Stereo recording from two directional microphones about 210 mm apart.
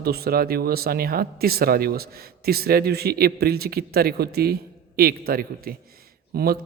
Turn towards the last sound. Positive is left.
turn(degrees=-45)  # may be behind; listen again after turning